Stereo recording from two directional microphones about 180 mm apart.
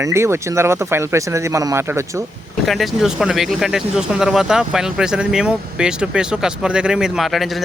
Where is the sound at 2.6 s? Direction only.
Centre (ahead or behind).